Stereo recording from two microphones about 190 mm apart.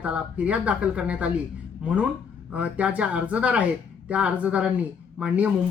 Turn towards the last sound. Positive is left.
turn(degrees=-5)  # may be behind; listen again after turning